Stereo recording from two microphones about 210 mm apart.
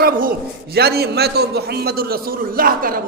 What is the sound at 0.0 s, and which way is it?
A man's voice, 45° right (ahead or behind).